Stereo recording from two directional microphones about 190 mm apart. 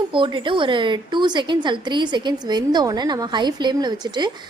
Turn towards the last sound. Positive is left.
turn(degrees=-20)  # may be behind; listen again after turning